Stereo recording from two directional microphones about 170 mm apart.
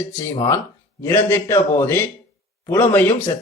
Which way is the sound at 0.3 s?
15° left (ahead or behind).